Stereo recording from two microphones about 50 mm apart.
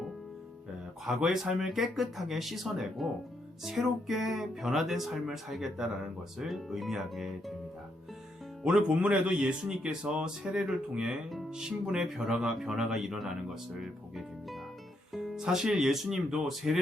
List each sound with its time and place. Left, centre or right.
1.0 s speech: centre
8.6 s speech: centre